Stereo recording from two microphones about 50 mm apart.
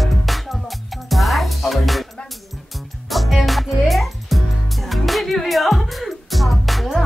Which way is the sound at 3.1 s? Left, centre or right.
Centre.